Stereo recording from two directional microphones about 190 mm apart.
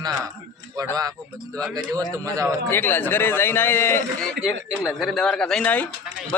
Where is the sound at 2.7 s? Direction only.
10° left (ahead or behind).